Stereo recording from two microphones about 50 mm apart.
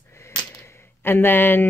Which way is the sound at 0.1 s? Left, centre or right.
Left.